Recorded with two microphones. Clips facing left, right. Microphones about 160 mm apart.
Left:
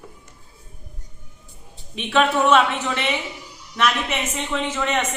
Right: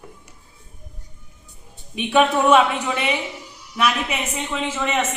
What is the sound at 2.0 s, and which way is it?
A woman's voice, 15° right (ahead or behind).